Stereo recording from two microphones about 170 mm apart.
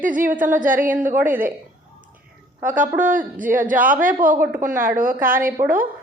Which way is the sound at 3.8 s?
10° right (ahead or behind).